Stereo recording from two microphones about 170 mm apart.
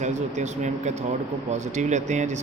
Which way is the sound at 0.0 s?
45° right (ahead or behind).